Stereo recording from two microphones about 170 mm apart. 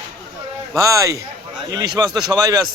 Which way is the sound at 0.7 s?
20° right (ahead or behind).